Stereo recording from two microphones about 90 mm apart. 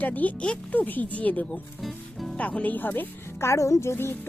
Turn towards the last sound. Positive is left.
turn(degrees=25)  # may be behind; listen again after turning